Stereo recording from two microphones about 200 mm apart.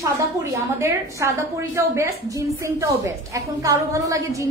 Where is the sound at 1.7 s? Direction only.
15° right (ahead or behind).